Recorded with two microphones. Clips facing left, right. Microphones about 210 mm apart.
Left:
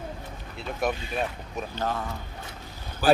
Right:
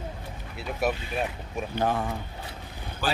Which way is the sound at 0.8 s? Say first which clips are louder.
Even; 5° right (ahead or behind).